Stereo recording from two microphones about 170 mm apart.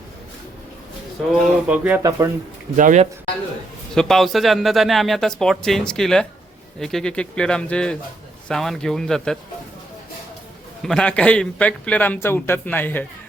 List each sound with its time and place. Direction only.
1.3 s speech: 5° right (ahead or behind)
2.0 s speech: 20° right (ahead or behind)
2.7 s a man's voice: 45° right (ahead or behind)
3.9 s speech: centre (ahead or behind)
10.8 s a man's voice: 5° left (ahead or behind)